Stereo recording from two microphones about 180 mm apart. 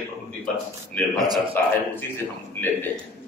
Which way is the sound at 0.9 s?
10° left (ahead or behind).